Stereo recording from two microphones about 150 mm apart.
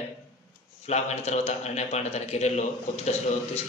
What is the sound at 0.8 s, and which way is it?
A man's voice, 45° left (ahead or behind).